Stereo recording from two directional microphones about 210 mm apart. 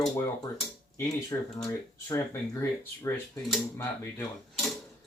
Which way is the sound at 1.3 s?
15° left (ahead or behind).